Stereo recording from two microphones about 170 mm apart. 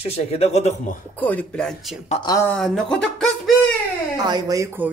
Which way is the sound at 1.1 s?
10° left (ahead or behind).